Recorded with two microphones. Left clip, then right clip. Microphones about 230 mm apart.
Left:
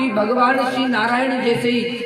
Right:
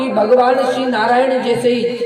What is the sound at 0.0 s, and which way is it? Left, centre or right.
Speech, left.